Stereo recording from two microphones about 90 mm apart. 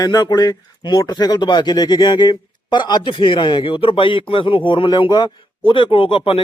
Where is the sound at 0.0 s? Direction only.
45° left (ahead or behind).